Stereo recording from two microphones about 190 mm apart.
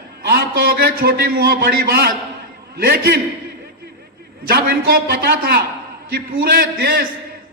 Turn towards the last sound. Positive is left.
turn(degrees=-50)  # may be behind; listen again after turning